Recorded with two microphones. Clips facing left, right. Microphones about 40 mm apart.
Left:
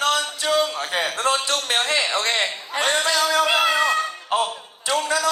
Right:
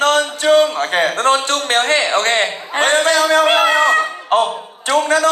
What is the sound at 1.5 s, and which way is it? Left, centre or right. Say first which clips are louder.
A man's voice: right 7 dB; right.